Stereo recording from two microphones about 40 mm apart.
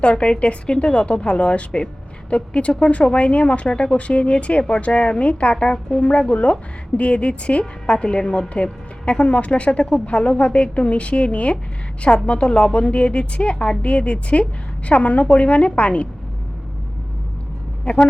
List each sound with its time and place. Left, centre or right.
0.0 s a woman's voice: left
3.7 s a woman's voice: centre
3.9 s a woman's voice: left
17.9 s a woman's voice: left